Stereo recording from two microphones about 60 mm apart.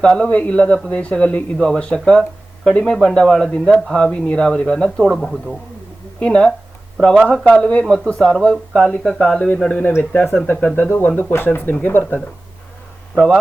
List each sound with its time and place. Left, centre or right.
0.0 s a man's voice: centre
5.0 s speech: centre
6.1 s a man's voice: centre